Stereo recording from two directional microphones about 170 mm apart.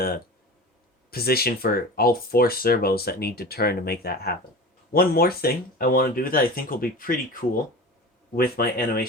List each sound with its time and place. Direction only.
1.1 s speech: 65° left (ahead or behind)
8.4 s speech: 60° left (ahead or behind)